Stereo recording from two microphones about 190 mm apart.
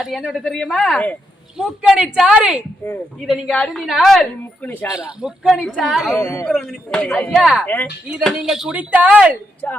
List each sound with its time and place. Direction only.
0.0 s a woman's voice: centre (ahead or behind)
2.8 s a man's voice: 10° left (ahead or behind)
3.2 s a woman's voice: centre (ahead or behind)
4.9 s a woman's voice: 5° right (ahead or behind)
9.6 s a man's voice: 5° left (ahead or behind)